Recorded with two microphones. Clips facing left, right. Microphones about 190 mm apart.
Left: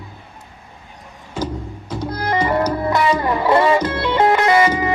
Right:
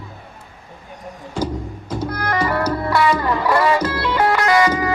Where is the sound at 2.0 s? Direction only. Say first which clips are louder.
Left 2 dB; 25° left (ahead or behind).